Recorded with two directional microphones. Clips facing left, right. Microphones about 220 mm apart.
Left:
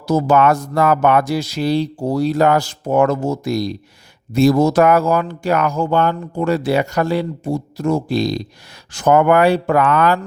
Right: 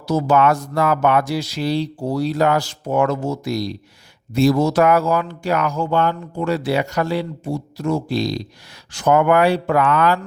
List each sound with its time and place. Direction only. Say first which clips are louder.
0.0 s speech: left 2 dB; 45° left (ahead or behind)